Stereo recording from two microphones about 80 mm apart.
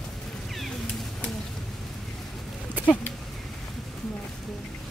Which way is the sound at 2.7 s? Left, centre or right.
Centre.